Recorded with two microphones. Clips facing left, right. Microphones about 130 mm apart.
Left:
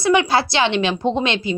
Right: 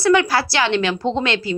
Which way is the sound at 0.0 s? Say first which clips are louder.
Even; 20° left (ahead or behind).